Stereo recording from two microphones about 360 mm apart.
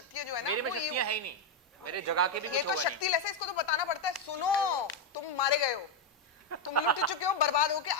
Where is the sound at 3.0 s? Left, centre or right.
Left.